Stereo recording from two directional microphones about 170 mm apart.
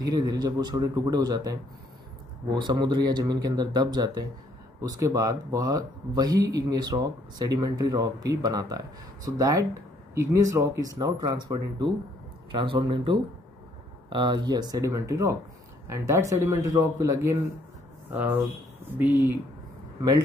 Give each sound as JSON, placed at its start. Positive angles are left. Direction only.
{"t": 0.0, "sound": "a man's voice", "side_deg": -20}